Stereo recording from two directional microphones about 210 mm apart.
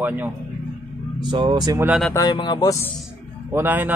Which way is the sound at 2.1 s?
20° left (ahead or behind).